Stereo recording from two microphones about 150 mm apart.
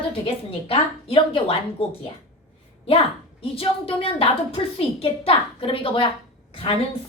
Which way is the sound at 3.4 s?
40° left (ahead or behind).